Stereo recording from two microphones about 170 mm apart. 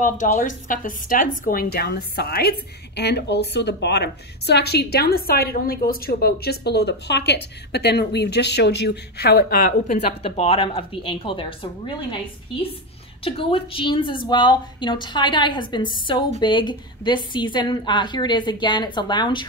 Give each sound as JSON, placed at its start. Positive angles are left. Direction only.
{"t": 0.0, "sound": "a woman's voice", "side_deg": 50}
{"t": 3.0, "sound": "a woman's voice", "side_deg": 80}
{"t": 10.2, "sound": "a woman's voice", "side_deg": 35}
{"t": 13.2, "sound": "a woman's voice", "side_deg": 35}